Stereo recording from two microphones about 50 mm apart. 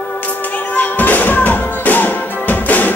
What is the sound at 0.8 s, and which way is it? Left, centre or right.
Music, left.